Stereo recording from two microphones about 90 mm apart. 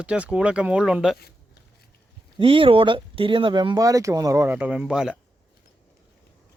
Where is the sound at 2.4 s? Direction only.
80° right; by 3.7 s 65° right (ahead or behind).